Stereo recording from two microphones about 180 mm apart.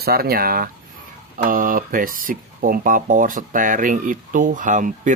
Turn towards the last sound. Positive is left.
turn(degrees=-45)  # may be behind; listen again after turning